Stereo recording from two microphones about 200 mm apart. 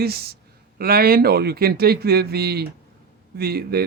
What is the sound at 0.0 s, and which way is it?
Speech, 50° right (ahead or behind).